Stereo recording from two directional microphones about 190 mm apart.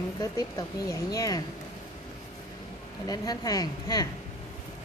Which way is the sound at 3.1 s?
20° left (ahead or behind).